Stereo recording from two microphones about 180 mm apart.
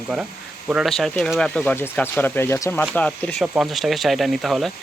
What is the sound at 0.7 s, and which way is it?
Speech, centre (ahead or behind).